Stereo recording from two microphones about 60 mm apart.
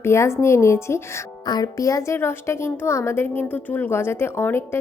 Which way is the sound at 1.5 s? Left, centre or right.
Left.